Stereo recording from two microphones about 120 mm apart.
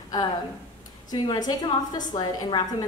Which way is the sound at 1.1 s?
35° left (ahead or behind).